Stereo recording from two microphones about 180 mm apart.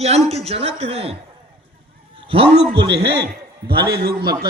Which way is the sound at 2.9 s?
65° right (ahead or behind).